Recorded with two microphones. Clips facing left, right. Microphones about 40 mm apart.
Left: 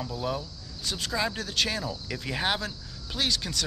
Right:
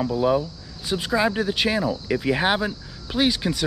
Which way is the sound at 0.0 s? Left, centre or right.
Right.